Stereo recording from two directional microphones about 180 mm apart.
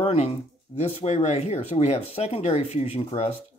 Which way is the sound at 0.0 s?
35° left (ahead or behind).